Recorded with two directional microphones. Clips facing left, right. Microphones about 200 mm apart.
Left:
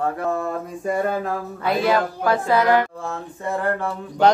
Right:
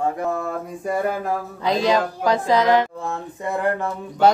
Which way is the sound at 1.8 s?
15° right (ahead or behind).